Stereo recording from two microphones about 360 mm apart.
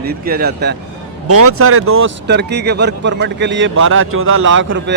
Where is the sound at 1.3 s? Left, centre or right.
Right.